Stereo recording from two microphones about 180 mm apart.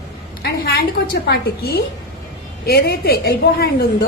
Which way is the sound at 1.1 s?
60° left (ahead or behind).